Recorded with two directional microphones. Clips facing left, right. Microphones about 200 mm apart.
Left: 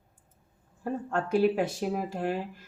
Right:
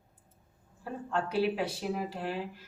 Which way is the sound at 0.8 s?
50° left (ahead or behind).